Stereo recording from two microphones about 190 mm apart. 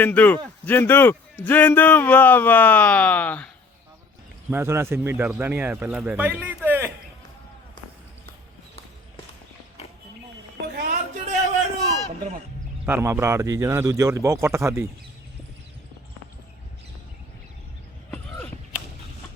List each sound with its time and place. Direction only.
0.0 s a man's voice: 10° left (ahead or behind)
4.4 s speech: 10° right (ahead or behind)
10.8 s a sound: 50° right (ahead or behind)
12.8 s speech: 10° right (ahead or behind)